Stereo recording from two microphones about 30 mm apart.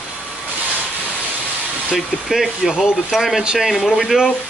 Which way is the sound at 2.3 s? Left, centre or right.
Centre.